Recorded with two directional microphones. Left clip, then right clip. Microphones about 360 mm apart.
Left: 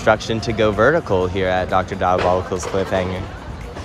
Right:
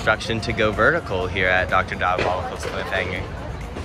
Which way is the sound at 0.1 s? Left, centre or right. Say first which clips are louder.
Left 4 dB; centre.